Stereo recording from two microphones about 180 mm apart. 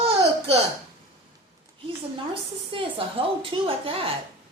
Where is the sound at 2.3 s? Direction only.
30° right (ahead or behind).